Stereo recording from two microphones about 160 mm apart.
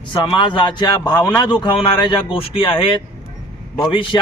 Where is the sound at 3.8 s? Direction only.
30° left (ahead or behind).